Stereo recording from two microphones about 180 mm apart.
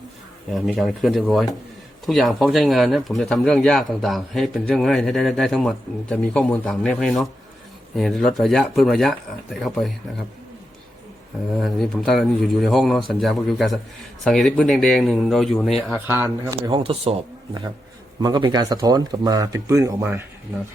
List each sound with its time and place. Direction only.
0.5 s speech: centre (ahead or behind)
11.5 s speech: centre (ahead or behind)
16.1 s speech: 10° right (ahead or behind)
16.6 s speech: 30° right (ahead or behind)
18.2 s speech: 25° right (ahead or behind)